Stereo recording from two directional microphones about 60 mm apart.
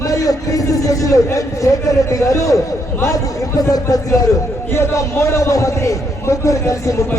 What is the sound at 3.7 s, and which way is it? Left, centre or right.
Speech, left.